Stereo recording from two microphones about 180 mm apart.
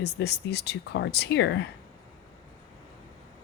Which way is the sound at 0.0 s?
65° left (ahead or behind).